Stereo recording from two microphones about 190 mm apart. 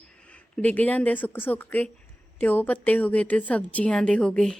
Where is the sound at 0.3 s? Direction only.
5° left (ahead or behind).